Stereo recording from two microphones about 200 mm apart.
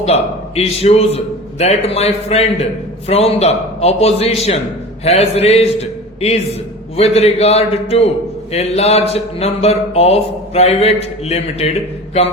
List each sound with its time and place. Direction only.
0.0 s speech: 30° left (ahead or behind)